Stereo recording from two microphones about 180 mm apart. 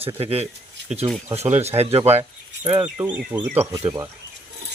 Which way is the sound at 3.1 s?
10° right (ahead or behind).